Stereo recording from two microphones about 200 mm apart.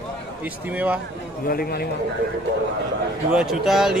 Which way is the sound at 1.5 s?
50° left (ahead or behind).